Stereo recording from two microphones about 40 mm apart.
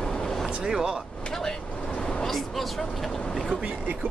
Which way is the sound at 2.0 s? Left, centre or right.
Left.